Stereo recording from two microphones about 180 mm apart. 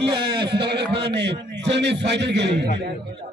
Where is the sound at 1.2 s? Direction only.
75° right (ahead or behind).